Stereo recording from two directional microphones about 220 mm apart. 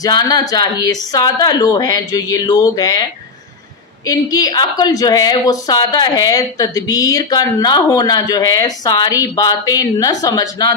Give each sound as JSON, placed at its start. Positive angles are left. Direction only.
{"t": 0.0, "sound": "a woman's voice", "side_deg": 20}